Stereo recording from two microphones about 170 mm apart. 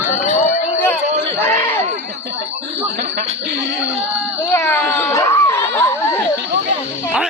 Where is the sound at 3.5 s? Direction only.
90° right.